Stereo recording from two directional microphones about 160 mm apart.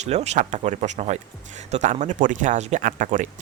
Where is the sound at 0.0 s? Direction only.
45° right (ahead or behind).